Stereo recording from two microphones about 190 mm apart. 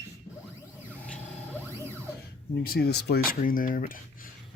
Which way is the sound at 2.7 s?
55° left (ahead or behind).